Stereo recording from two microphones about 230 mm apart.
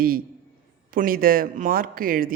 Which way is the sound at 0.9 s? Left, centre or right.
Right.